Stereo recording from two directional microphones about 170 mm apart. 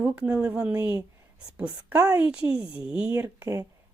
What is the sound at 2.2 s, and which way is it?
Speech, 10° right (ahead or behind).